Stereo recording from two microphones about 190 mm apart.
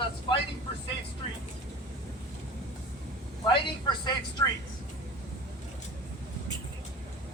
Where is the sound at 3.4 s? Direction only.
25° left (ahead or behind).